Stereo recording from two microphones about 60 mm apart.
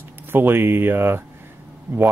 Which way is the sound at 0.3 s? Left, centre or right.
Right.